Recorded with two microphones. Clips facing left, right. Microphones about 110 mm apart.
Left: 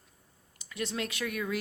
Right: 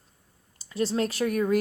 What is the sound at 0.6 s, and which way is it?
Speech, 35° right (ahead or behind).